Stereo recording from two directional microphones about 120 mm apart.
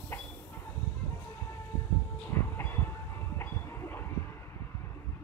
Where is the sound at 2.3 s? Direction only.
20° left (ahead or behind).